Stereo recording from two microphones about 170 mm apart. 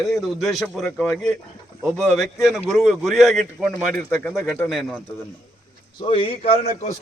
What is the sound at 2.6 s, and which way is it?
Speech, centre (ahead or behind).